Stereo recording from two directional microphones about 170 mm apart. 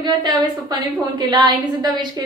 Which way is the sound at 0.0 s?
25° right (ahead or behind).